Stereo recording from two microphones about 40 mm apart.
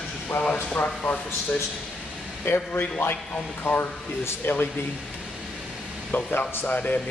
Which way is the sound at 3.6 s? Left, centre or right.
Left.